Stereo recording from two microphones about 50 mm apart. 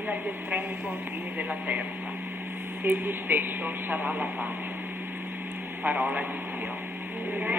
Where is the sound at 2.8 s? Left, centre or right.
Right.